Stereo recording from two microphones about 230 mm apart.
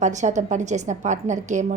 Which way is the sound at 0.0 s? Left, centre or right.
Right.